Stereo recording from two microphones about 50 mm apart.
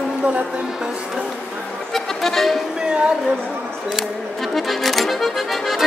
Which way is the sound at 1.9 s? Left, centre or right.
Centre.